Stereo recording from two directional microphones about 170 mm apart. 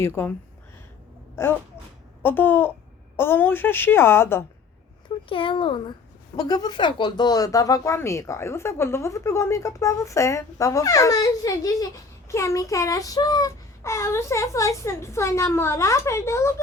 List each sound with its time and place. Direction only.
0.0 s speech: 15° left (ahead or behind)
1.4 s speech: 15° left (ahead or behind)
5.0 s a child's voice: 30° left (ahead or behind)